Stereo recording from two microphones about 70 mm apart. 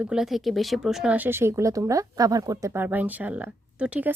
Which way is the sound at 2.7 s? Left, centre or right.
Right.